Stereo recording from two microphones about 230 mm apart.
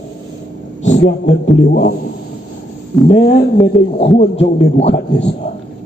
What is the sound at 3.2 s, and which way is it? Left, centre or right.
A man's voice, left.